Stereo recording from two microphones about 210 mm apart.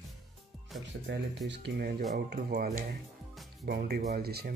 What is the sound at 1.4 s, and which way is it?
Speech, 55° right (ahead or behind).